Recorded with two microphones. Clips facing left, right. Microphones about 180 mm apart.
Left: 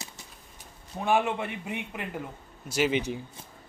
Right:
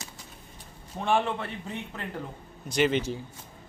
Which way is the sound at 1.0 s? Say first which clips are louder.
Left 1 dB; 10° left (ahead or behind).